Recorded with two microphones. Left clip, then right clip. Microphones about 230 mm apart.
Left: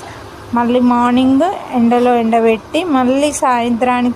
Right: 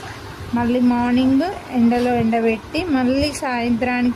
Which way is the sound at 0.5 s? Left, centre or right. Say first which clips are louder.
Left 6 dB; centre.